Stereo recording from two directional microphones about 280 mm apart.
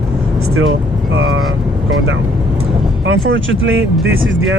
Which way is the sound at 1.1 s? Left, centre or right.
Right.